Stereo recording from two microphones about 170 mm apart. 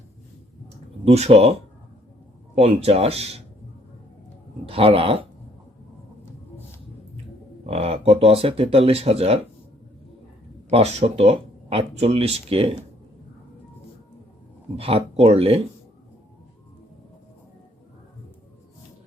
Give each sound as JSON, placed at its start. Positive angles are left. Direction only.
{"t": 1.0, "sound": "speech", "side_deg": -40}
{"t": 2.6, "sound": "speech", "side_deg": -35}
{"t": 4.7, "sound": "speech", "side_deg": -35}
{"t": 7.7, "sound": "speech", "side_deg": -35}
{"t": 10.7, "sound": "speech", "side_deg": -35}
{"t": 14.8, "sound": "speech", "side_deg": -35}